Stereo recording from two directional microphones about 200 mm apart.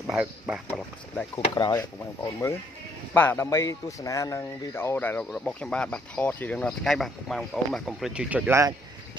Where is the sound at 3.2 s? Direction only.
10° left (ahead or behind).